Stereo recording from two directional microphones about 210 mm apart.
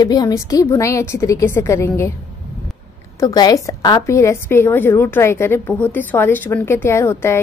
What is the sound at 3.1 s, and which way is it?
A woman's voice, 15° left (ahead or behind).